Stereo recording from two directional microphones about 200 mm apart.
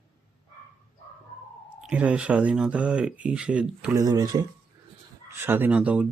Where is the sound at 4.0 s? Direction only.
20° right (ahead or behind).